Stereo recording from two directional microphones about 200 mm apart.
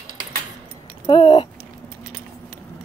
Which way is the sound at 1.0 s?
25° left (ahead or behind).